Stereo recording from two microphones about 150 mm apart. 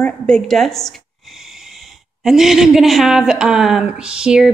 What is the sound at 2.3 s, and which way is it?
A woman's voice, centre (ahead or behind).